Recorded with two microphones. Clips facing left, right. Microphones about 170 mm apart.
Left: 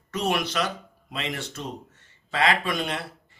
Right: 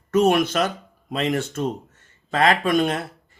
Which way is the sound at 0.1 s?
50° right (ahead or behind).